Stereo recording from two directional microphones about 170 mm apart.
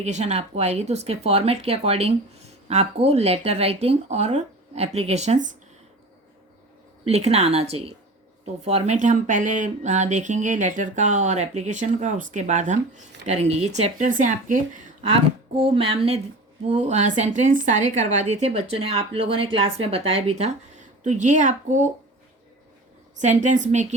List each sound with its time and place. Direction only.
0.0 s a woman's voice: 40° right (ahead or behind)
7.0 s a woman's voice: 35° right (ahead or behind)
15.5 s a woman's voice: 35° right (ahead or behind)
23.2 s speech: 45° right (ahead or behind)